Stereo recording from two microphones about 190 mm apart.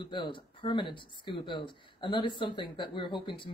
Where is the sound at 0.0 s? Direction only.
25° left (ahead or behind).